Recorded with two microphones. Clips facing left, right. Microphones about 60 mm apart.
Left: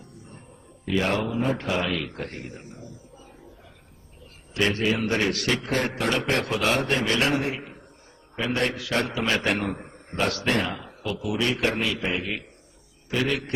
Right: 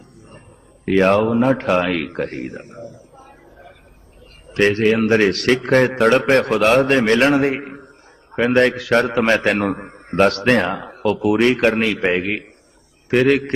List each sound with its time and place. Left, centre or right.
0.9 s a man's voice: right